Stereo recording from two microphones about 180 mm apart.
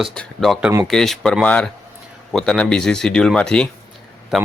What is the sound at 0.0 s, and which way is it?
A man's voice, centre (ahead or behind).